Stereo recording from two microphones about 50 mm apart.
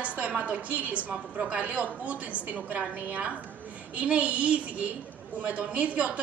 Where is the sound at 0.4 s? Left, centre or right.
Right.